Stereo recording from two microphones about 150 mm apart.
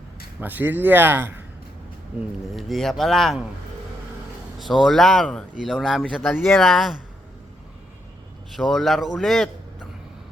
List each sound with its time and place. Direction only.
0.3 s a man's voice: 10° right (ahead or behind)
2.5 s speech: centre (ahead or behind)
4.6 s speech: centre (ahead or behind)
8.5 s speech: centre (ahead or behind)